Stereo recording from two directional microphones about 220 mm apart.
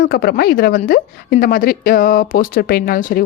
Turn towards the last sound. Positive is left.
turn(degrees=40)  # may be behind; listen again after turning